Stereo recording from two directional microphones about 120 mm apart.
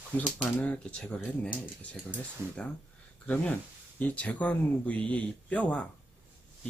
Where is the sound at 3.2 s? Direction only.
10° left (ahead or behind).